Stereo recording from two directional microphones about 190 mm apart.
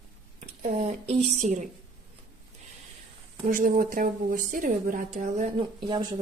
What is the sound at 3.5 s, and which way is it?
A woman's voice, 45° right (ahead or behind).